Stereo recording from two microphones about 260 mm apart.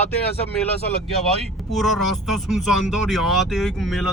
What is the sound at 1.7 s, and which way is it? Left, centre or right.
Speech, centre.